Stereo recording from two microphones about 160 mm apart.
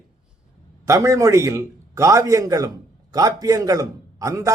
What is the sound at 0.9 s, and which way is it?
A man's voice, 20° right (ahead or behind).